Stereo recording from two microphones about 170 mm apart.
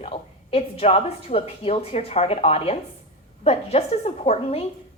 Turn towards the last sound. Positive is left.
turn(degrees=40)  # may be behind; listen again after turning